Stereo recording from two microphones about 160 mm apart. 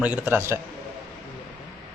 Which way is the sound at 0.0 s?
10° right (ahead or behind).